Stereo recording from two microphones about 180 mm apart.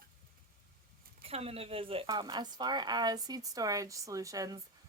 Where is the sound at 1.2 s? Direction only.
35° right (ahead or behind).